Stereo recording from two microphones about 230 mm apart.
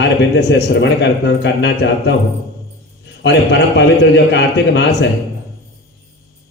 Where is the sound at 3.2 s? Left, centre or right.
Left.